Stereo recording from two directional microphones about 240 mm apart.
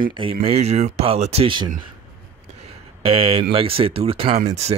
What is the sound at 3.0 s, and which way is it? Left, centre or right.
Speech, right.